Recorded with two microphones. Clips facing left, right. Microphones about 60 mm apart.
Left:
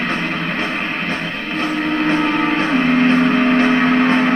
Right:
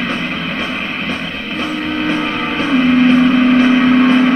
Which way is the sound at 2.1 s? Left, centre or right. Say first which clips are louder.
Left 2 dB; left.